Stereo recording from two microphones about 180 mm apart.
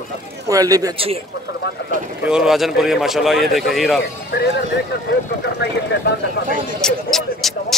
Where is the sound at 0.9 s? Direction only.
30° right (ahead or behind).